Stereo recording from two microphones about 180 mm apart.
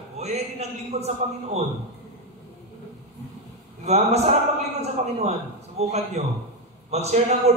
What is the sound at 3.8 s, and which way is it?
A man's voice, 35° right (ahead or behind).